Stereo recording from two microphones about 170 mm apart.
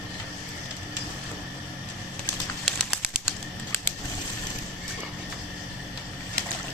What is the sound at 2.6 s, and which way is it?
Bird, centre (ahead or behind).